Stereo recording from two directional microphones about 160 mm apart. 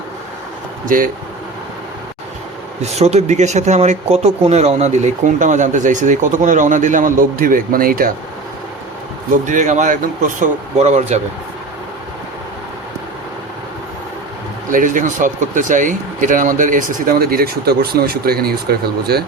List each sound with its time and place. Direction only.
0.9 s speech: 60° right (ahead or behind)
2.9 s speech: 45° right (ahead or behind); by 8.1 s 65° right (ahead or behind)
9.3 s speech: 50° right (ahead or behind)
14.7 s speech: 55° right (ahead or behind); by 19.2 s 80° right